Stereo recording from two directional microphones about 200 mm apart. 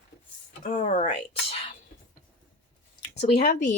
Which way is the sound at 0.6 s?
40° left (ahead or behind).